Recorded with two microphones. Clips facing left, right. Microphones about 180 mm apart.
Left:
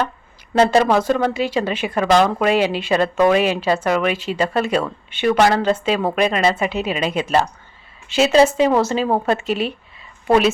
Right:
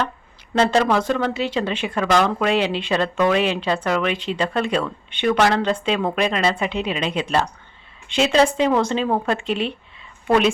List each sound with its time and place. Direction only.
0.5 s a woman's voice: 10° left (ahead or behind)